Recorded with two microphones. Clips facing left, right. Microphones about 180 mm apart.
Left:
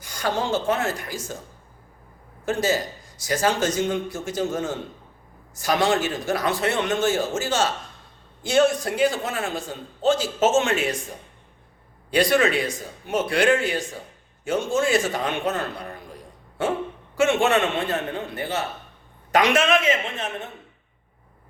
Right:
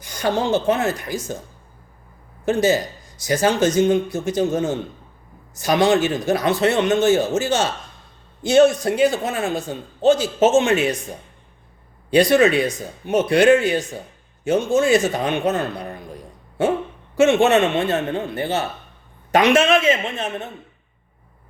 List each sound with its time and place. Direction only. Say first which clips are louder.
0.0 s speech: right 4 dB; 20° right (ahead or behind)
2.4 s speech: right 5 dB; 20° right (ahead or behind)
12.1 s speech: right 5 dB; 20° right (ahead or behind)
17.2 s speech: right 5 dB; 20° right (ahead or behind)